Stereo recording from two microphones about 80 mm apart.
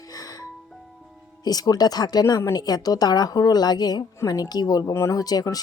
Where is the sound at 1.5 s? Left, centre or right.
Left.